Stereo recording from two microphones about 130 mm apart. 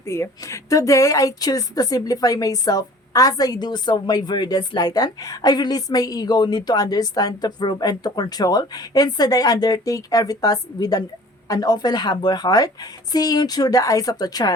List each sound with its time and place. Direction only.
0.0 s a woman's voice: 20° left (ahead or behind)